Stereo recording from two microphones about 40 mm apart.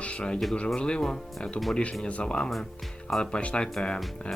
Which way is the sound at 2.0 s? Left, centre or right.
Left.